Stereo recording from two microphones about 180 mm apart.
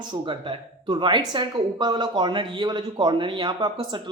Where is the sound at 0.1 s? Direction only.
25° right (ahead or behind).